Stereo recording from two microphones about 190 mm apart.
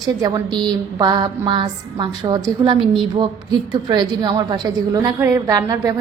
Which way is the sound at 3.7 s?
20° right (ahead or behind).